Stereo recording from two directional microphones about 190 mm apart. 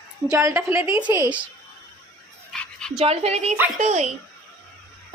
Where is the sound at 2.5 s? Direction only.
5° left (ahead or behind).